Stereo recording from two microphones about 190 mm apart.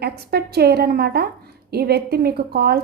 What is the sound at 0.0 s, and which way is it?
A woman's voice, 55° right (ahead or behind).